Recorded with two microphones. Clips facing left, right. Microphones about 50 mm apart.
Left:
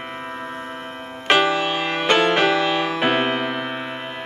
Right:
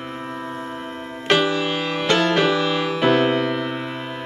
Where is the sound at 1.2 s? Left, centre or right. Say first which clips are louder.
Left 1 dB; centre.